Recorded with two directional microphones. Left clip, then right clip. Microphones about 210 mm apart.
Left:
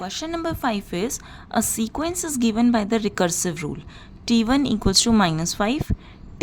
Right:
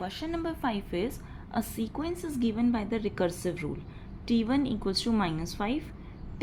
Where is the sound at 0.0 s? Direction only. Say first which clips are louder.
Left 7 dB; 25° left (ahead or behind).